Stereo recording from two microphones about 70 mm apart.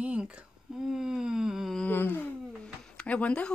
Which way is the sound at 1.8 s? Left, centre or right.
Left.